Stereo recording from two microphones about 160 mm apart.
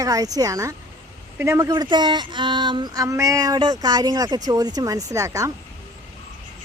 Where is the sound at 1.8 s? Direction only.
25° right (ahead or behind).